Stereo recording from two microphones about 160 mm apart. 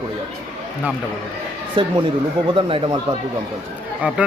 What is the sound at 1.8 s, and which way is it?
A man's voice, 30° right (ahead or behind).